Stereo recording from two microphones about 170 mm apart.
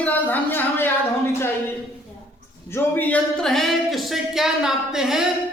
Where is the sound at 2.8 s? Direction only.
10° left (ahead or behind).